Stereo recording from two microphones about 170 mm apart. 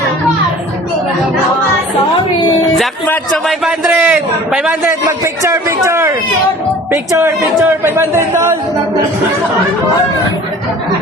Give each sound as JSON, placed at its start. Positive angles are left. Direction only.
{"t": 2.7, "sound": "a man's voice", "side_deg": 0}
{"t": 5.0, "sound": "a man's voice", "side_deg": -15}